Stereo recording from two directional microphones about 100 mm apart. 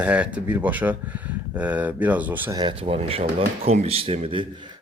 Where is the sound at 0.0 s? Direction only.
10° right (ahead or behind).